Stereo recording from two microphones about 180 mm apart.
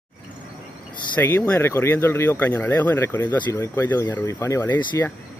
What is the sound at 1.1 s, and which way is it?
Speech, 10° left (ahead or behind).